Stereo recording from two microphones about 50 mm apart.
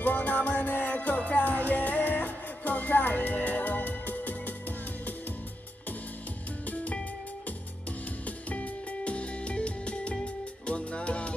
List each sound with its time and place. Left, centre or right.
0.0 s music: left
6.6 s music: left
8.3 s music: left